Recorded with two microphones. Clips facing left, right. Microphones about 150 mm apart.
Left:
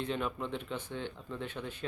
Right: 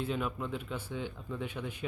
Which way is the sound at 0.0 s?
5° right (ahead or behind).